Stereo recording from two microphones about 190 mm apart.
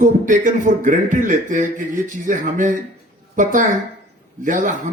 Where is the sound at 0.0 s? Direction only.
40° right (ahead or behind).